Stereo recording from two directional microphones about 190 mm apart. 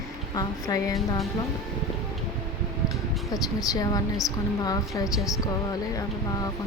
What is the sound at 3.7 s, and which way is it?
A woman's voice, 20° left (ahead or behind).